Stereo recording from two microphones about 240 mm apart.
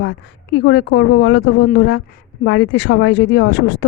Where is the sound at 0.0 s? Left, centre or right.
Left.